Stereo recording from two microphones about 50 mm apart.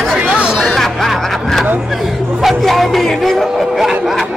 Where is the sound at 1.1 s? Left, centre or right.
Centre.